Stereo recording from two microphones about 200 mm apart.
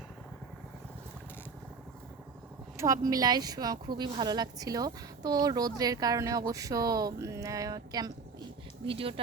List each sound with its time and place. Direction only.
2.7 s speech: 15° right (ahead or behind)